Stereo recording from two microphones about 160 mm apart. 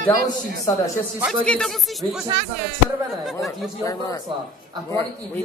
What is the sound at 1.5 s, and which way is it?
Speech, 5° left (ahead or behind).